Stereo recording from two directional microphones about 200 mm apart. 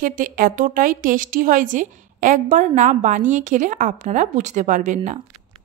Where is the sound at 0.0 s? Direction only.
40° right (ahead or behind).